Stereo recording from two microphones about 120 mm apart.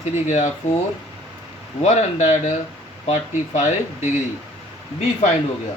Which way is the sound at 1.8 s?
75° left (ahead or behind).